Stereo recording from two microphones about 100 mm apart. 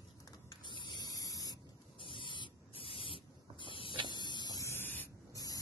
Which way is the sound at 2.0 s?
60° left (ahead or behind).